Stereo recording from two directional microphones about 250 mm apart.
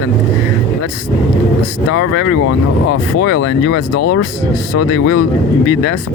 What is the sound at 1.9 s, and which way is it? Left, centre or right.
Speech, left.